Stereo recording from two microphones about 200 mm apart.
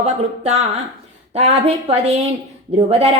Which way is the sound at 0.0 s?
35° right (ahead or behind).